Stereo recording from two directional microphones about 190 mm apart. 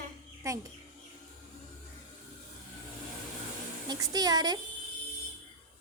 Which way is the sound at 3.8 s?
20° right (ahead or behind).